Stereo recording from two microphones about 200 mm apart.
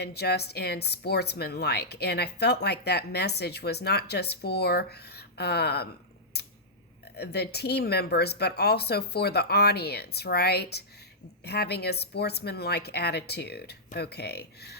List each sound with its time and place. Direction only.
0.0 s speech: 55° left (ahead or behind)
6.3 s a sound: 55° left (ahead or behind)
7.2 s speech: 55° left (ahead or behind)